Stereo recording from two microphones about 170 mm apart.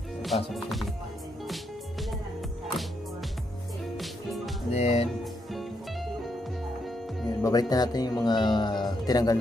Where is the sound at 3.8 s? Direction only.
Centre (ahead or behind).